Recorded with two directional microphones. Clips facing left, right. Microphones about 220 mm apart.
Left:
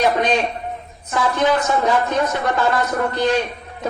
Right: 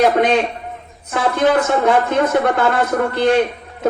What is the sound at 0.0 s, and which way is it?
A woman's voice, 60° right (ahead or behind).